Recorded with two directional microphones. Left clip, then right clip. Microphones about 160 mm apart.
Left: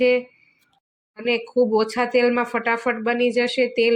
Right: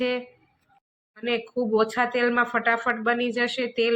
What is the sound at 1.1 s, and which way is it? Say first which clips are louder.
Speech: left 6 dB; 20° left (ahead or behind).